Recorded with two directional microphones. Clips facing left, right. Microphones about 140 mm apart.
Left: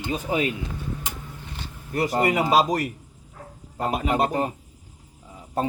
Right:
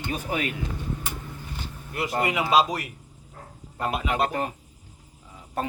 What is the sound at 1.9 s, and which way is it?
A man's voice, 40° left (ahead or behind).